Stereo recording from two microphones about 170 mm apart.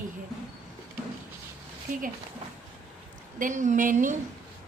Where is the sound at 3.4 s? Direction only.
45° right (ahead or behind).